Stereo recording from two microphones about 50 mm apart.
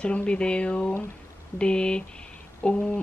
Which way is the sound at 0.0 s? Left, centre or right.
Left.